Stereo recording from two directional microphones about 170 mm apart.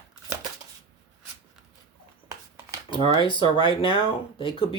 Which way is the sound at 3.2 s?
30° left (ahead or behind).